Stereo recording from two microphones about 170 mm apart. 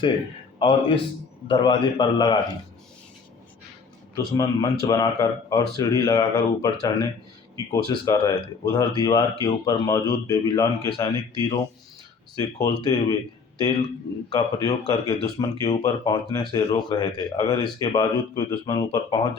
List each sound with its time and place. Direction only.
0.6 s a man's voice: 30° left (ahead or behind)
4.4 s speech: 20° left (ahead or behind)
14.3 s speech: 25° left (ahead or behind)